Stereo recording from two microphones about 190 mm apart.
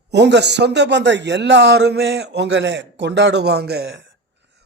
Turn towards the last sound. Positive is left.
turn(degrees=-75)  # may be behind; listen again after turning